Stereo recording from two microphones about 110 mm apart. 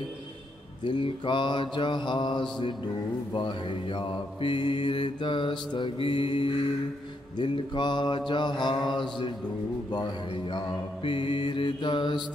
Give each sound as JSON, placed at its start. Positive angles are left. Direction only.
{"t": 0.8, "sound": "mantra", "side_deg": 45}